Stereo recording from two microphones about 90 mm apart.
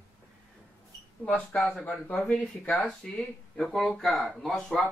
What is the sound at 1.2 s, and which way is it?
Speech, 10° left (ahead or behind).